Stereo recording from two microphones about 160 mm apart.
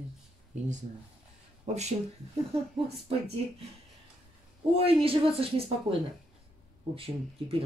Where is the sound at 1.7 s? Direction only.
45° right (ahead or behind).